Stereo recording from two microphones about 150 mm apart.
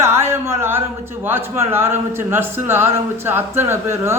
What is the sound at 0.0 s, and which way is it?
A man's voice, 15° right (ahead or behind).